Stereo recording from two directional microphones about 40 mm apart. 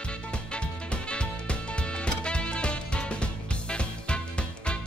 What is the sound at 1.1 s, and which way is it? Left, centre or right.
Music, left.